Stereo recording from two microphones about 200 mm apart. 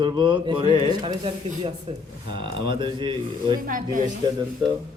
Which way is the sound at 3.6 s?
40° right (ahead or behind).